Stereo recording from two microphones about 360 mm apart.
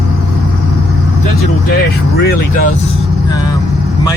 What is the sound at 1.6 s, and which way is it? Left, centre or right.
Vehicle, left.